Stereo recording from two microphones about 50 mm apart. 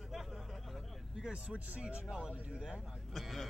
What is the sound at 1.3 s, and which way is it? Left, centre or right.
Speech, right.